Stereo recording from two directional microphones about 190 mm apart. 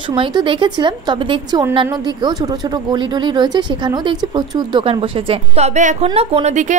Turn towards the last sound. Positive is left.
turn(degrees=-40)  # may be behind; listen again after turning